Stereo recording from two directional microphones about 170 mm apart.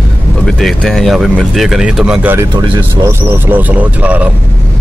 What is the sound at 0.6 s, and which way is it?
Speech, centre (ahead or behind).